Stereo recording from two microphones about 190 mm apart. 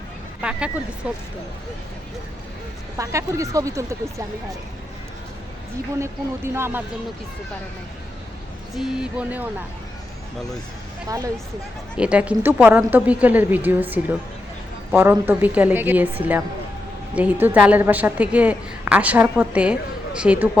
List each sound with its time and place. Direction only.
0.4 s a sound: 5° right (ahead or behind)
3.0 s a woman's voice: 15° right (ahead or behind)
6.0 s a woman's voice: 15° right (ahead or behind)
8.7 s speech: centre (ahead or behind)
11.9 s a woman's voice: 5° right (ahead or behind)